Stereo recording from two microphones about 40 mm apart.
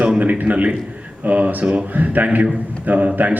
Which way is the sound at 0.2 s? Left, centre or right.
Right.